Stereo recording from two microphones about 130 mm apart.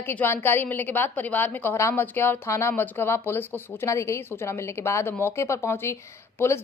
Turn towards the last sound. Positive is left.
turn(degrees=20)  # may be behind; listen again after turning